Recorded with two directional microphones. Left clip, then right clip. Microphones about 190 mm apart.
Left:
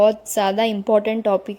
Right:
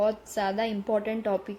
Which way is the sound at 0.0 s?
45° left (ahead or behind).